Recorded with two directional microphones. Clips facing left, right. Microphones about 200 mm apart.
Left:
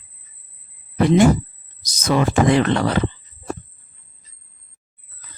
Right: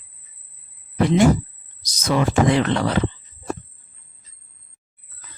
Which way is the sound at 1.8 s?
50° left (ahead or behind).